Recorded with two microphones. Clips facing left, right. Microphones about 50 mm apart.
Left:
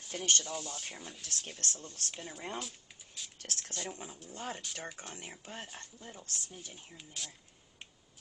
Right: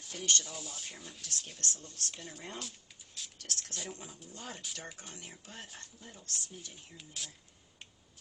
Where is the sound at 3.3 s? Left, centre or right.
Left.